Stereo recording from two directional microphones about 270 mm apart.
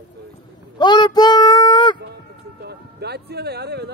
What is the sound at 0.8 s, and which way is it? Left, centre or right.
Child singing, centre.